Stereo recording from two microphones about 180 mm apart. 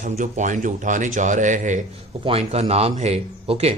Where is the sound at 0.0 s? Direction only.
45° right (ahead or behind).